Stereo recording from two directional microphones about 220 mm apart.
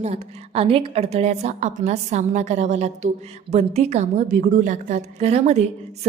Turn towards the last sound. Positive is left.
turn(degrees=-30)  # may be behind; listen again after turning